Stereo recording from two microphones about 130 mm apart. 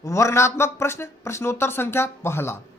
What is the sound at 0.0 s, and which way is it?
Speech, 20° left (ahead or behind).